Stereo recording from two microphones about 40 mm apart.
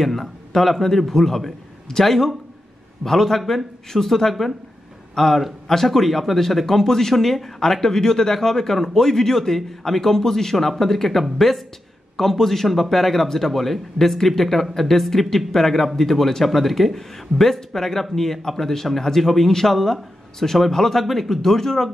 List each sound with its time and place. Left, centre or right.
0.0 s speech: centre